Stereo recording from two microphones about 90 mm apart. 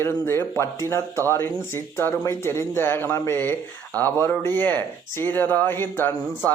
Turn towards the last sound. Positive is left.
turn(degrees=20)  # may be behind; listen again after turning